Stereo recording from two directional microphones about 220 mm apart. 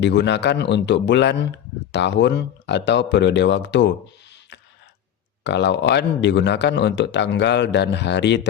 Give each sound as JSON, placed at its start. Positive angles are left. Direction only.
{"t": 0.0, "sound": "a man's voice", "side_deg": 50}
{"t": 5.4, "sound": "a man's voice", "side_deg": 50}